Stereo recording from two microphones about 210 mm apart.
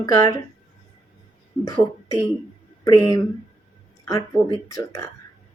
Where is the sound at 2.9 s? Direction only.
15° left (ahead or behind).